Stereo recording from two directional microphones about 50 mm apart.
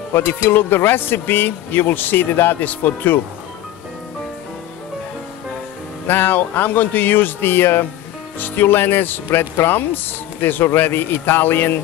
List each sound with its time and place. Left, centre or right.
0.1 s speech: left
6.0 s speech: left